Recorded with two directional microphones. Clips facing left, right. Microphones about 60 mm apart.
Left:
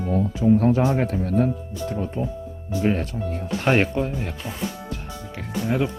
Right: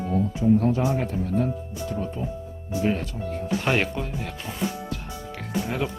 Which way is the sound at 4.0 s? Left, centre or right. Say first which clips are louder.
Left 7 dB; centre.